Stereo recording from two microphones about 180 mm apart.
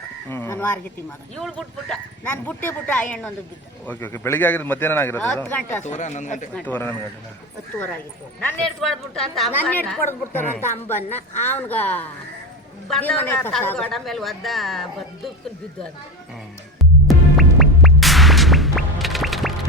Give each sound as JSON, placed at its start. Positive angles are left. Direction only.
{"t": 0.3, "sound": "speech", "side_deg": 15}
{"t": 1.4, "sound": "speech", "side_deg": 0}
{"t": 5.8, "sound": "speech", "side_deg": 40}
{"t": 6.5, "sound": "speech", "side_deg": 10}
{"t": 8.4, "sound": "speech", "side_deg": 5}
{"t": 16.7, "sound": "music", "side_deg": 0}